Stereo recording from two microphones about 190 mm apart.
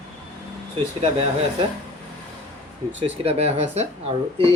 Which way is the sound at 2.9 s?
35° right (ahead or behind).